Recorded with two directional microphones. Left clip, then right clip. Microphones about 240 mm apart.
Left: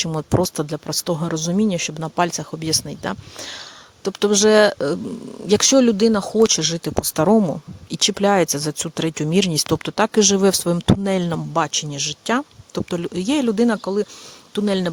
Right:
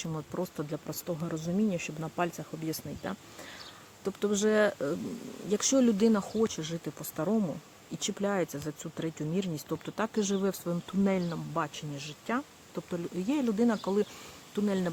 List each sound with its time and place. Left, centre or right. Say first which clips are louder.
0.0 s speech: left 16 dB; left
14.5 s speech: left 11 dB; left